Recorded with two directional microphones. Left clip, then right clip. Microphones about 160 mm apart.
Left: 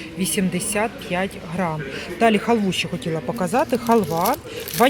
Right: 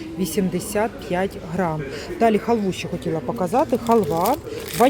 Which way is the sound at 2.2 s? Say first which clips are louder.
Left 1 dB; 10° right (ahead or behind).